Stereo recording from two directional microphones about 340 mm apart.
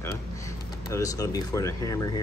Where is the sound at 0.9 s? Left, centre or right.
Centre.